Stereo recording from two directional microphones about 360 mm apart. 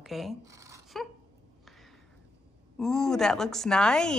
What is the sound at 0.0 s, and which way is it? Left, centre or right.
Speech, centre.